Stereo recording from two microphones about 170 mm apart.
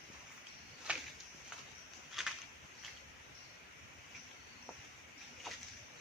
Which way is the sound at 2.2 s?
Centre (ahead or behind).